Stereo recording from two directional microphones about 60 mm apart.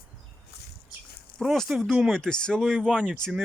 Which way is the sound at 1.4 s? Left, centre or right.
Centre.